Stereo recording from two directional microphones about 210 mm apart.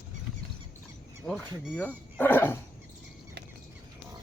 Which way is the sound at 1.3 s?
5° left (ahead or behind).